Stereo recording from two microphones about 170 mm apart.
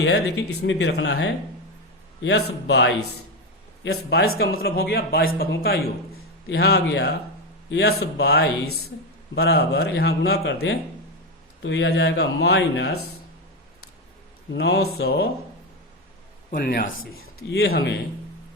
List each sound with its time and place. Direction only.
0.7 s a man's voice: 80° left
3.8 s a man's voice: 75° left (ahead or behind)
11.6 s a man's voice: 90° left
14.5 s a man's voice: 75° left (ahead or behind)
16.5 s a man's voice: 60° left (ahead or behind)